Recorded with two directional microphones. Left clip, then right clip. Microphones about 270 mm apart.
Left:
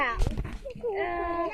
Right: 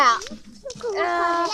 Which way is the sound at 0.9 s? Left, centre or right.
Right.